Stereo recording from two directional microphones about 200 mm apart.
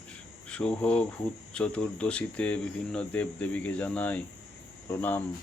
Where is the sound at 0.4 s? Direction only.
5° left (ahead or behind).